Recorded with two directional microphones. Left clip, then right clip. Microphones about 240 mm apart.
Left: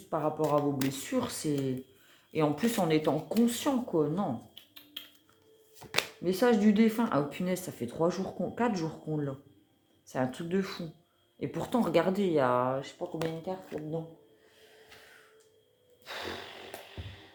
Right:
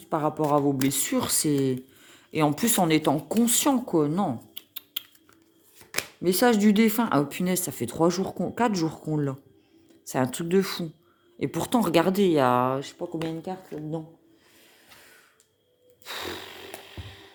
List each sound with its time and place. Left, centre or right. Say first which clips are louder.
0.1 s speech: right 5 dB; right
6.2 s speech: right 6 dB; right
16.0 s a sound: right 4 dB; right